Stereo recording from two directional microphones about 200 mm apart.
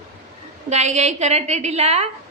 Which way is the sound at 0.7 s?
35° right (ahead or behind).